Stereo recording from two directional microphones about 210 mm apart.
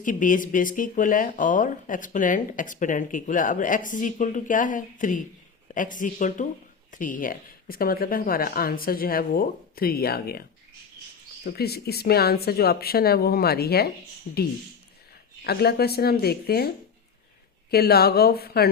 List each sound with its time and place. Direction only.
0.0 s speech: 40° left (ahead or behind)
11.4 s speech: 50° left (ahead or behind)
15.4 s speech: 50° left (ahead or behind)